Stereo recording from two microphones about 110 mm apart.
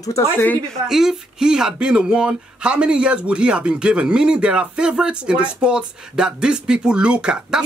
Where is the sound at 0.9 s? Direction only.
5° right (ahead or behind).